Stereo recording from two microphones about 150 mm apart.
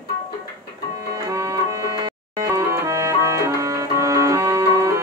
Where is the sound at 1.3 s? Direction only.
20° right (ahead or behind).